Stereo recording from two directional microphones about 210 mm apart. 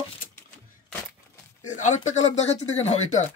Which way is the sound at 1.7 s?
35° left (ahead or behind).